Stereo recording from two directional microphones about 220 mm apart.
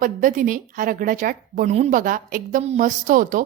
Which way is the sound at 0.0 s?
35° right (ahead or behind).